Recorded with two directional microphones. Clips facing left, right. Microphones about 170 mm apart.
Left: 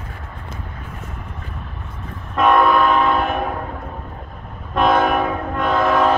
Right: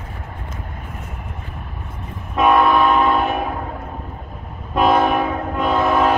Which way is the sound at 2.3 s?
5° right (ahead or behind).